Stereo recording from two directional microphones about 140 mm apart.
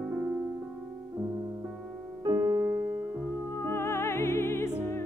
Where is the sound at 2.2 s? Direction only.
30° right (ahead or behind).